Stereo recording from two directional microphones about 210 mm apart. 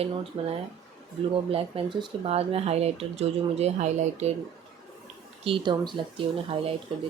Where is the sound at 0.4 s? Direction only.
25° right (ahead or behind).